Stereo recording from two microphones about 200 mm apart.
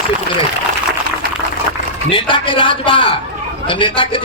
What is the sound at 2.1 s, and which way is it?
A man's voice, 25° left (ahead or behind).